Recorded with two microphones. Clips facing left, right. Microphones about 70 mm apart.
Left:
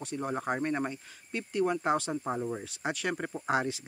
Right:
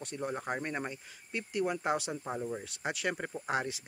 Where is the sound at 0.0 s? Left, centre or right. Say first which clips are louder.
Left 3 dB; centre.